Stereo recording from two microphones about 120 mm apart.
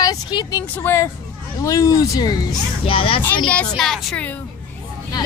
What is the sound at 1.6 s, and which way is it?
Speech, 25° left (ahead or behind).